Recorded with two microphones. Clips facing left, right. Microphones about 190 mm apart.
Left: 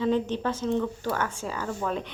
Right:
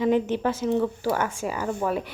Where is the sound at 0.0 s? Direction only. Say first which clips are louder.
Right 3 dB; 10° right (ahead or behind).